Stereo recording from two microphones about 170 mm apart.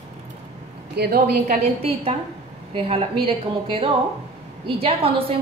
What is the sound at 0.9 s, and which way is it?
Speech, 65° right (ahead or behind).